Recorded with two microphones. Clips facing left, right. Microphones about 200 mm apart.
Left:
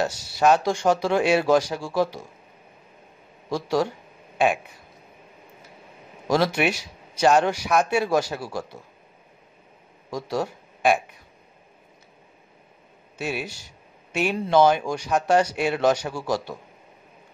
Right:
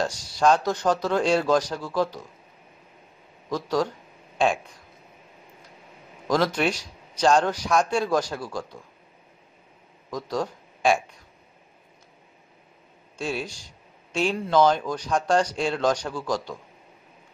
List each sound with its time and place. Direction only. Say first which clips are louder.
0.0 s a man's voice: left 1 dB; 5° left (ahead or behind)
3.4 s a man's voice: left 2 dB; 10° left (ahead or behind)
6.2 s a man's voice: left 1 dB; 10° left (ahead or behind)
10.0 s a man's voice: left 1 dB; 10° left (ahead or behind)
13.4 s a sound: even; 5° left (ahead or behind)
14.5 s a man's voice: left 2 dB; 10° left (ahead or behind)